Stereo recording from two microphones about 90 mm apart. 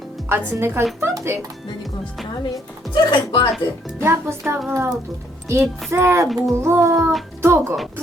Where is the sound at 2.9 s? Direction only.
55° left (ahead or behind).